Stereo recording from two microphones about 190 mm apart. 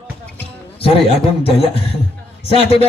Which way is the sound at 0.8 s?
30° left (ahead or behind).